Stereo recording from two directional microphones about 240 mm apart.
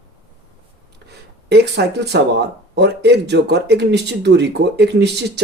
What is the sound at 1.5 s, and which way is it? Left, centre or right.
Speech, right.